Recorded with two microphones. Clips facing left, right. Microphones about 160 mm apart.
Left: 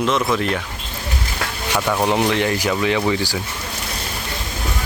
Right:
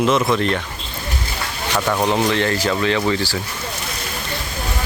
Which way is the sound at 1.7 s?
5° left (ahead or behind).